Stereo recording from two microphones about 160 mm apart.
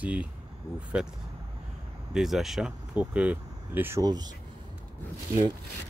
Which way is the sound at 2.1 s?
Centre (ahead or behind).